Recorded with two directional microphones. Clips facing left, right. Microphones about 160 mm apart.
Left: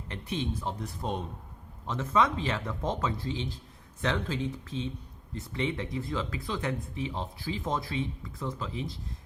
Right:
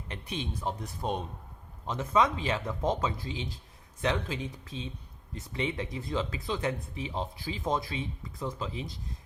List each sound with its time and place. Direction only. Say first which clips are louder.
0.1 s speech: left 4 dB; 15° right (ahead or behind)